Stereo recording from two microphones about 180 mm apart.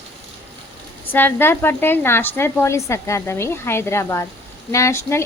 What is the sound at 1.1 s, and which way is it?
A woman's voice, 10° left (ahead or behind).